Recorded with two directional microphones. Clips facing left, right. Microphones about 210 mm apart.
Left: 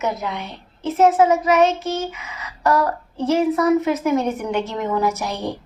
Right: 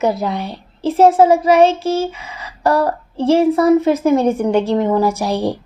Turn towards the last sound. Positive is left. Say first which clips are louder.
# right 7 dB
turn(degrees=-30)  # may be behind; listen again after turning